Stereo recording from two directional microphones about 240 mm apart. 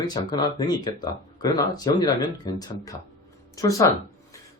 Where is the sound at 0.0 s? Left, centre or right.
Centre.